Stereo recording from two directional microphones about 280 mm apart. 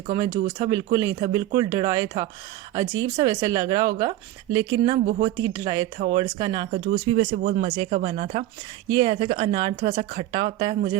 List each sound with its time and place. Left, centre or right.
0.1 s speech: centre
6.7 s speech: right